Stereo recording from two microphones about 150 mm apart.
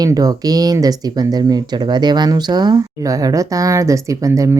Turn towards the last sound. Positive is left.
turn(degrees=-20)  # may be behind; listen again after turning